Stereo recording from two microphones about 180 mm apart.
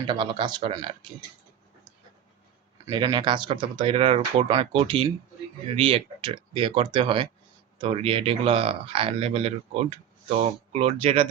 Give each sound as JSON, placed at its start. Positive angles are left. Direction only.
{"t": 0.1, "sound": "speech", "side_deg": -25}
{"t": 2.8, "sound": "speech", "side_deg": -25}